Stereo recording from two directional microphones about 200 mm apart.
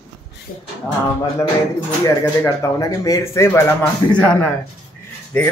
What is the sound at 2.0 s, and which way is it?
Speech, 10° left (ahead or behind).